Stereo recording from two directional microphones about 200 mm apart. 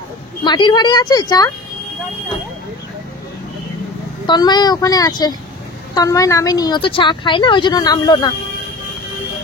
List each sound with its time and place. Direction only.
0.4 s speech: 25° left (ahead or behind)
4.3 s speech: 20° left (ahead or behind)